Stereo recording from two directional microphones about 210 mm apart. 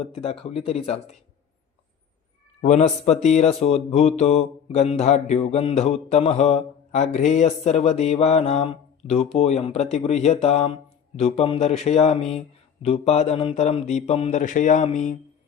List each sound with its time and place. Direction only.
0.0 s speech: 30° left (ahead or behind)
2.6 s speech: 30° left (ahead or behind)